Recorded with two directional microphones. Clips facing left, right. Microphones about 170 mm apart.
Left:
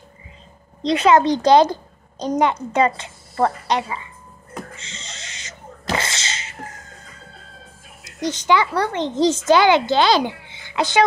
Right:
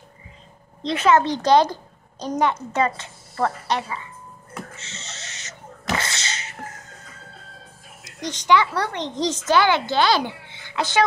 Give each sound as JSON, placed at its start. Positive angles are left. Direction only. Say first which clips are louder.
{"t": 0.8, "sound": "a woman's voice", "louder": "left 3 dB", "side_deg": 15}
{"t": 4.7, "sound": "owl", "louder": "left 1 dB", "side_deg": 15}
{"t": 5.9, "sound": "sneeze", "louder": "left 2 dB", "side_deg": 20}
{"t": 8.0, "sound": "a sound", "louder": "left 6 dB", "side_deg": 10}
{"t": 8.5, "sound": "a child's voice", "louder": "even", "side_deg": 0}
{"t": 9.5, "sound": "a woman's voice", "louder": "left 3 dB", "side_deg": 20}